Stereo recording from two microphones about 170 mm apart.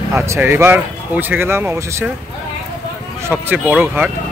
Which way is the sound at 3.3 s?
10° right (ahead or behind).